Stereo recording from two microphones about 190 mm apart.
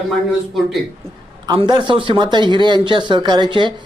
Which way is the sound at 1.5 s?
25° right (ahead or behind).